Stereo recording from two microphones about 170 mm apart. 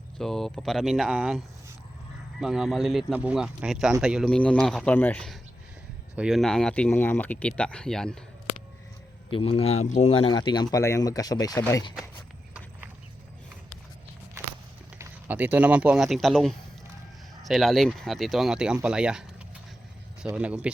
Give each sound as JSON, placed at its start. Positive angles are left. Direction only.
{"t": 0.2, "sound": "speech", "side_deg": 0}
{"t": 2.4, "sound": "speech", "side_deg": -5}
{"t": 9.3, "sound": "speech", "side_deg": 35}
{"t": 14.9, "sound": "speech", "side_deg": -10}
{"t": 20.2, "sound": "speech", "side_deg": -5}